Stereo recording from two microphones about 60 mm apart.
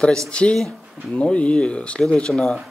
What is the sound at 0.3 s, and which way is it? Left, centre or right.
Speech, centre.